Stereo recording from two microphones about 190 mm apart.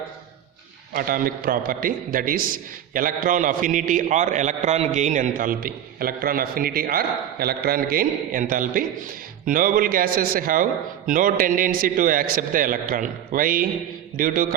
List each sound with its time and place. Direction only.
0.9 s a man's voice: 50° right (ahead or behind)